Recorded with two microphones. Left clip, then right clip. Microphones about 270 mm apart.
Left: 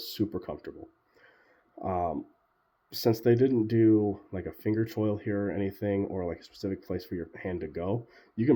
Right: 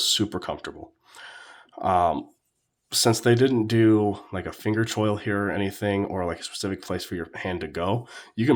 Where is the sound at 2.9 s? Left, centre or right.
Centre.